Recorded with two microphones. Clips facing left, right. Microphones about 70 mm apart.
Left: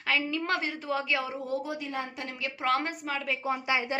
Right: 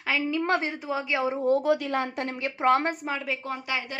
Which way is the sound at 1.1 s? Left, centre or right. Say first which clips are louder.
Right 6 dB; right.